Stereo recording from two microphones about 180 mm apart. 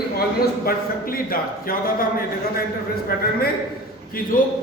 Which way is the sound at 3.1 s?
55° left (ahead or behind).